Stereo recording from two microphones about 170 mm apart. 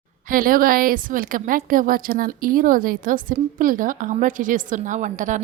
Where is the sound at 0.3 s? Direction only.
55° right (ahead or behind).